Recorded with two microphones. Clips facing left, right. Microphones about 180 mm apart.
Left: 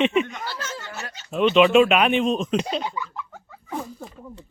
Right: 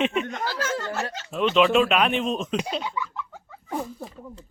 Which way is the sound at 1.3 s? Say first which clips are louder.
Left 4 dB; centre (ahead or behind).